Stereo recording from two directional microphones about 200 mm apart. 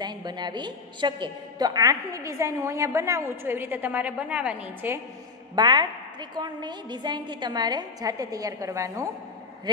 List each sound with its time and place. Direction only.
0.0 s a woman's voice: 20° right (ahead or behind)
5.6 s a woman's voice: 20° right (ahead or behind)